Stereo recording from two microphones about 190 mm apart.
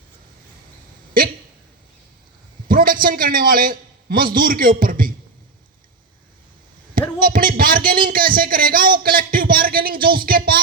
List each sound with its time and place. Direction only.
2.6 s a man's voice: 50° right (ahead or behind)
7.2 s a sound: 50° right (ahead or behind)
8.0 s a man's voice: 50° right (ahead or behind)